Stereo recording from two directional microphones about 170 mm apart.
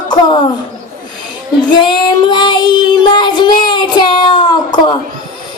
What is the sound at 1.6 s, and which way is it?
Child singing, 25° left (ahead or behind).